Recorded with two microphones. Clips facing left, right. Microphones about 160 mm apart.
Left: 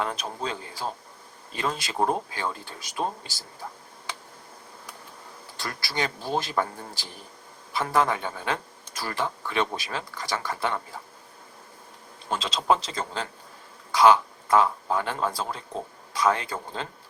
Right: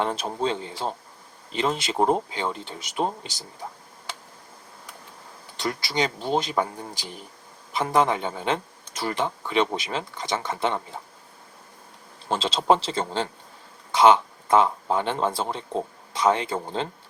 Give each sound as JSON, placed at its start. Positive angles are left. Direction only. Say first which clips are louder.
{"t": 0.0, "sound": "speech", "louder": "right 5 dB", "side_deg": -30}
{"t": 5.5, "sound": "speech", "louder": "right 5 dB", "side_deg": -20}
{"t": 12.3, "sound": "speech", "louder": "right 3 dB", "side_deg": -30}